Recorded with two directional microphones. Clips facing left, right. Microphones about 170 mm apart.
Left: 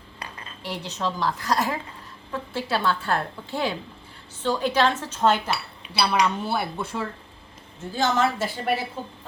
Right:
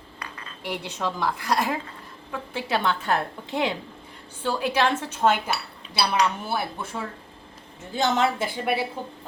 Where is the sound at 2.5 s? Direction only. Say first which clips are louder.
Even; 20° right (ahead or behind).